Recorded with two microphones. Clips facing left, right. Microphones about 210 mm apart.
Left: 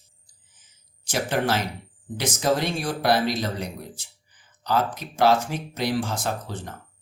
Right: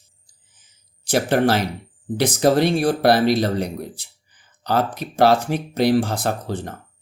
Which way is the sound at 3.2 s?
60° right (ahead or behind).